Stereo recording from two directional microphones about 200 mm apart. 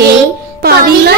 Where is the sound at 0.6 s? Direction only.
50° right (ahead or behind).